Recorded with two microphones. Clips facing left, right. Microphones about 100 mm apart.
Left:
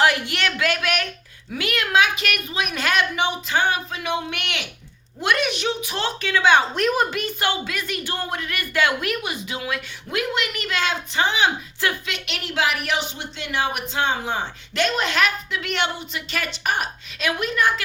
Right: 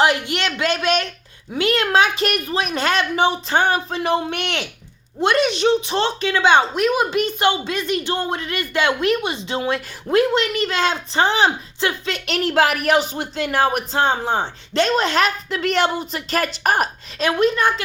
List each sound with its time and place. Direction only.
0.0 s speech: 20° right (ahead or behind); by 4.6 s 40° right (ahead or behind)
5.2 s speech: 25° right (ahead or behind)
6.7 s speech: 5° right (ahead or behind)
7.1 s speech: 20° right (ahead or behind)